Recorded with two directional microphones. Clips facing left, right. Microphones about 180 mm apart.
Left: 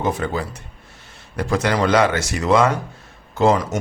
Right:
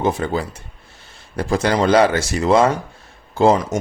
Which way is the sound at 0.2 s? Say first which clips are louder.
Right 2 dB; 30° right (ahead or behind).